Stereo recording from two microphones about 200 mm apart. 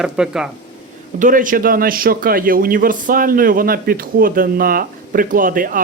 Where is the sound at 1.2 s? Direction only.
40° right (ahead or behind).